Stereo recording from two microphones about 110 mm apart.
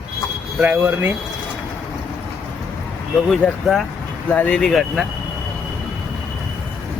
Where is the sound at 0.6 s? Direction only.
20° right (ahead or behind).